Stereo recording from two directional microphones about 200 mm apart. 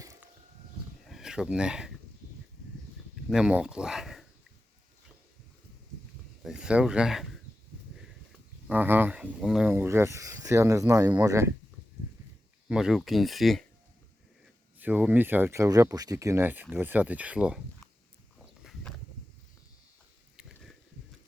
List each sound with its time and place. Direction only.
0.0 s a sound: 15° right (ahead or behind)
1.0 s speech: centre (ahead or behind)
3.2 s speech: 5° right (ahead or behind)
6.4 s speech: 5° right (ahead or behind)
8.6 s speech: 10° right (ahead or behind)
12.6 s speech: 5° right (ahead or behind)
14.8 s speech: 10° right (ahead or behind)
18.6 s walk: centre (ahead or behind)